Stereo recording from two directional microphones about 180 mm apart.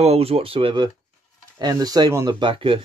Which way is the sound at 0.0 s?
35° right (ahead or behind).